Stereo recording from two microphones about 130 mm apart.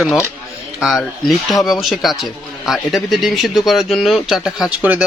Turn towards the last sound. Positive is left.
turn(degrees=-10)  # may be behind; listen again after turning